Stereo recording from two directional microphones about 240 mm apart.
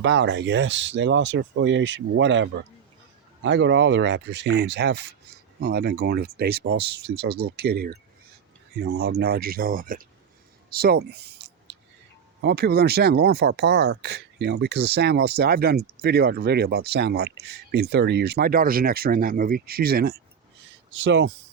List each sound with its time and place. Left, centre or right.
0.0 s speech: right
10.7 s a sound: right
12.4 s speech: right